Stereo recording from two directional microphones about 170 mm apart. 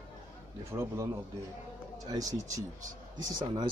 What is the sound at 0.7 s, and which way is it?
Speech, 15° right (ahead or behind).